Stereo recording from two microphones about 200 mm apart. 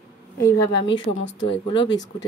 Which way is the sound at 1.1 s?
65° left (ahead or behind).